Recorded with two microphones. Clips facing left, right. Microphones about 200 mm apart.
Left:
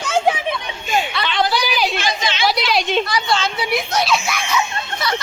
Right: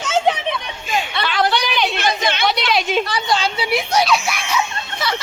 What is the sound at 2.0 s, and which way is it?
Chatter, 55° right (ahead or behind).